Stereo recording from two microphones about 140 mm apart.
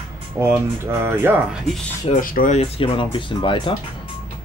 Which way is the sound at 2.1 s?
75° left (ahead or behind).